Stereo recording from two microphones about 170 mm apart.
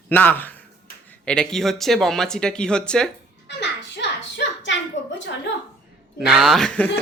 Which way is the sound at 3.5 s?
90° left.